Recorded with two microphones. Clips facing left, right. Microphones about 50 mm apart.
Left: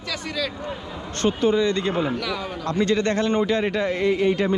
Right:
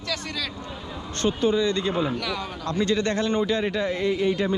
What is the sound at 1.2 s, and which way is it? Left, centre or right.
Speech, left.